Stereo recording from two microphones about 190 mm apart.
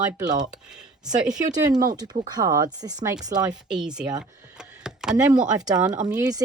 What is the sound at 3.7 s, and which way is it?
Speech, 5° right (ahead or behind).